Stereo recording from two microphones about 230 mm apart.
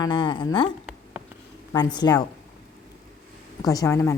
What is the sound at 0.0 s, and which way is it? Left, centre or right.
Speech, centre.